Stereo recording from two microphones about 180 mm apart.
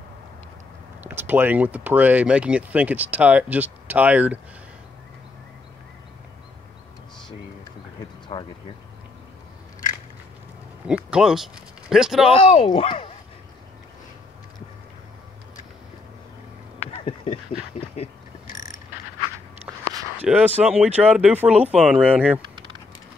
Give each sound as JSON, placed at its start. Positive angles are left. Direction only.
{"t": 1.0, "sound": "speech", "side_deg": -10}
{"t": 10.9, "sound": "speech", "side_deg": -5}
{"t": 12.3, "sound": "speech", "side_deg": 30}
{"t": 16.9, "sound": "a sound", "side_deg": 30}
{"t": 17.7, "sound": "speech", "side_deg": 35}
{"t": 20.2, "sound": "speech", "side_deg": -10}
{"t": 22.4, "sound": "typing", "side_deg": -25}